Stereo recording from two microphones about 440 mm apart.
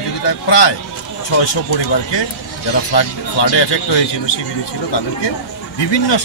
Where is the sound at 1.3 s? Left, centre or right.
Left.